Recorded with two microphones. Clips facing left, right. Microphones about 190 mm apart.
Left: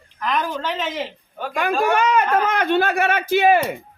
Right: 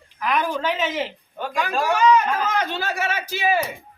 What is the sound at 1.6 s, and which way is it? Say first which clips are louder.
Speech: left 2 dB; 60° left (ahead or behind).